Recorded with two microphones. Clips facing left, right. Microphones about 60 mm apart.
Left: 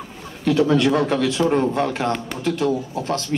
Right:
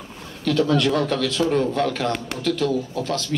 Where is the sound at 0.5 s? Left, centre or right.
Left.